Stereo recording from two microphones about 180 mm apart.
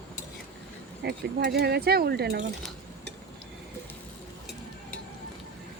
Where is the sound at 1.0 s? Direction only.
70° right (ahead or behind).